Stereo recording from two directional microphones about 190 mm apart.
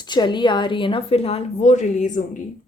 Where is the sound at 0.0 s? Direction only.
25° left (ahead or behind); by 2.2 s 40° left (ahead or behind).